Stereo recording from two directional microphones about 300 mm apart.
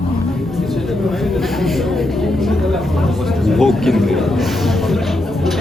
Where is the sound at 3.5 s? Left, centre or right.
Centre.